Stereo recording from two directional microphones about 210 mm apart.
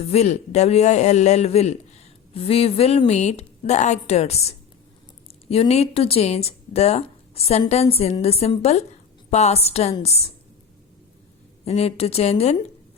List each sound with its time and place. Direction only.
0.0 s a man's voice: 30° left (ahead or behind)
11.6 s a man's voice: 30° left (ahead or behind)